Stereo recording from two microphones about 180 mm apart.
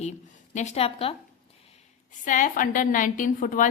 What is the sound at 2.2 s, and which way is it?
A woman's voice, 45° left (ahead or behind).